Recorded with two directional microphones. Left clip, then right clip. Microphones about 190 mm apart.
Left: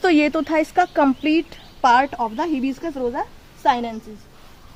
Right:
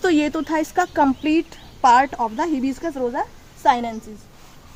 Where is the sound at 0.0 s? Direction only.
35° left (ahead or behind).